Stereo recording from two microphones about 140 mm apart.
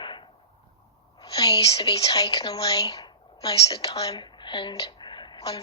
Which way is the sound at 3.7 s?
40° left (ahead or behind).